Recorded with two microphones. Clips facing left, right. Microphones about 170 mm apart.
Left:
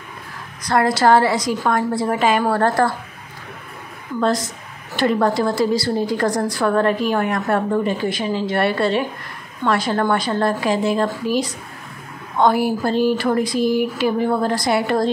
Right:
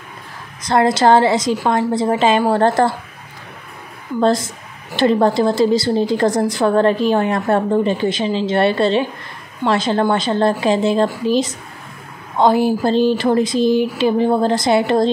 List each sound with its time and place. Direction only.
0.7 s a woman's voice: 25° right (ahead or behind)
4.2 s a woman's voice: 25° right (ahead or behind)